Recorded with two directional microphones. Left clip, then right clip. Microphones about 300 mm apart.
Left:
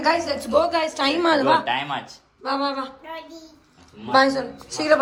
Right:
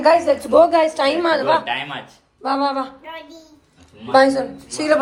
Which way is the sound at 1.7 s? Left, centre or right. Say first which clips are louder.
Even; left.